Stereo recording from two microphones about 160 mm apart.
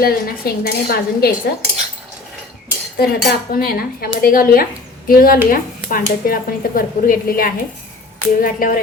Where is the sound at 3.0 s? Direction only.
70° left (ahead or behind).